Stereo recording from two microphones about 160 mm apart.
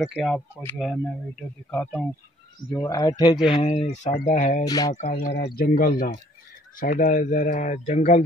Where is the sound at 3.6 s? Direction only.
45° left (ahead or behind).